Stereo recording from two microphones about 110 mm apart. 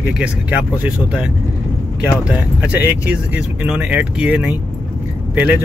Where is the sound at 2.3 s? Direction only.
10° right (ahead or behind).